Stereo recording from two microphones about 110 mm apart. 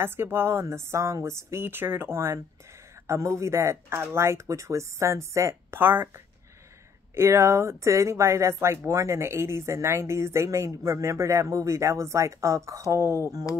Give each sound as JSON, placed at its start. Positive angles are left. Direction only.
{"t": 0.0, "sound": "speech", "side_deg": -20}